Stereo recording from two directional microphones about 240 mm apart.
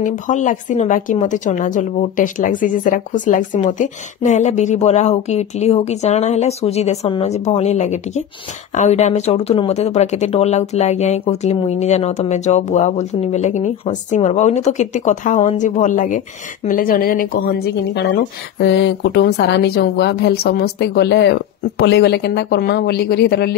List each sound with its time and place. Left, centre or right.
0.0 s a woman's voice: left